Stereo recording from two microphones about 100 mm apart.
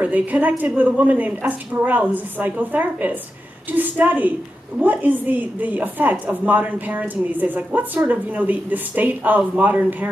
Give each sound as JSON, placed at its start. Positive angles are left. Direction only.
{"t": 0.0, "sound": "a woman's voice", "side_deg": -15}